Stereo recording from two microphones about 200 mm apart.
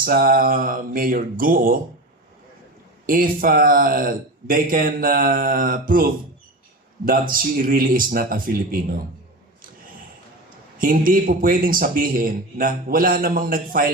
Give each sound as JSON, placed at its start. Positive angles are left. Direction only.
{"t": 0.0, "sound": "speech", "side_deg": -45}
{"t": 3.1, "sound": "speech", "side_deg": -45}
{"t": 10.8, "sound": "speech", "side_deg": -45}